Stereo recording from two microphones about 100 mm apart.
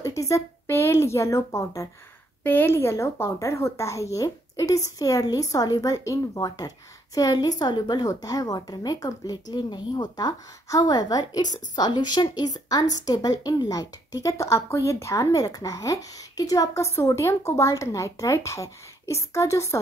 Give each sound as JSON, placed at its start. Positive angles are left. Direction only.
{"t": 0.0, "sound": "a woman's voice", "side_deg": 30}
{"t": 2.4, "sound": "a woman's voice", "side_deg": 20}